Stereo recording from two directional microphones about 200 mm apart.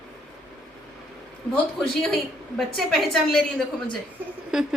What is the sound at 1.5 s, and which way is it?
A woman's voice, centre (ahead or behind).